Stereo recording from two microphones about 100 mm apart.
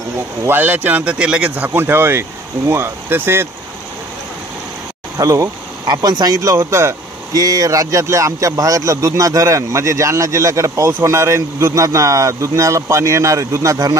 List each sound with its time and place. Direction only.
0.5 s speech: 20° right (ahead or behind)
5.1 s speech: 35° right (ahead or behind)